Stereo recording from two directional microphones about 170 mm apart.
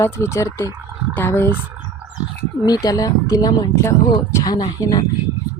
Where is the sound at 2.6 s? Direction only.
20° left (ahead or behind).